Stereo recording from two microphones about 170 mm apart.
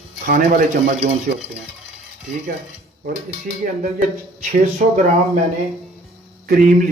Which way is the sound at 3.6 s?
55° right (ahead or behind).